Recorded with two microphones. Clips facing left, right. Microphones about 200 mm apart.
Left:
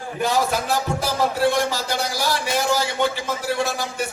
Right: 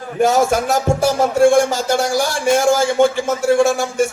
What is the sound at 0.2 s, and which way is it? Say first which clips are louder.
Speech: right 7 dB; 45° right (ahead or behind).